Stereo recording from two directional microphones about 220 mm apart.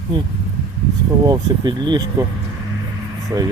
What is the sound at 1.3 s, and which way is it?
Speech, 20° right (ahead or behind).